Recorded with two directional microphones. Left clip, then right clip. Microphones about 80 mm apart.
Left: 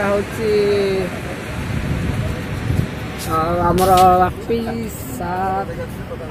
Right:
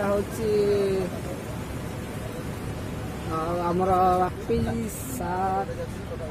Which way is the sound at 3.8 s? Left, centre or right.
Left.